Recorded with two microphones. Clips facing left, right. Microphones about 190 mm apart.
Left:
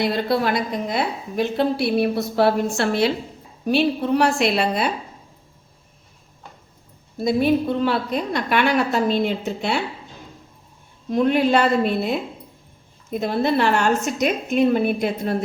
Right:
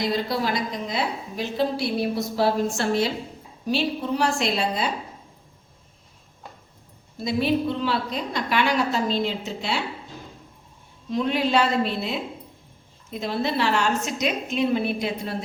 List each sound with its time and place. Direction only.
0.0 s a woman's voice: 60° left (ahead or behind)
7.2 s a woman's voice: 50° left (ahead or behind)
11.1 s a woman's voice: 55° left (ahead or behind)